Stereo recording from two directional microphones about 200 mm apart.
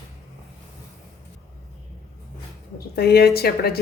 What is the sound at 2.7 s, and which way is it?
A woman's voice, 50° left (ahead or behind).